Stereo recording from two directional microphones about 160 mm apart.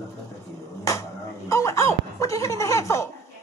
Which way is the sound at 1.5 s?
20° left (ahead or behind).